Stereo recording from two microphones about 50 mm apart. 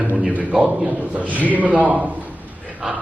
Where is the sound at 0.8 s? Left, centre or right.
Right.